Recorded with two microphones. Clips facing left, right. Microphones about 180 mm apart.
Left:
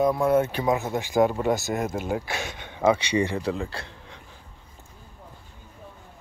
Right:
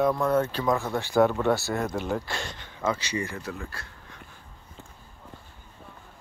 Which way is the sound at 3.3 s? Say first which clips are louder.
Left 8 dB; 25° left (ahead or behind).